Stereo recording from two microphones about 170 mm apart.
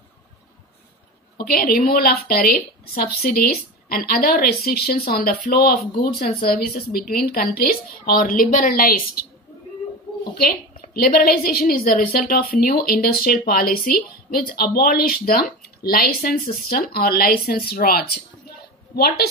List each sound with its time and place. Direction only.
1.4 s a woman's voice: 65° left (ahead or behind)
11.0 s a woman's voice: 60° left (ahead or behind)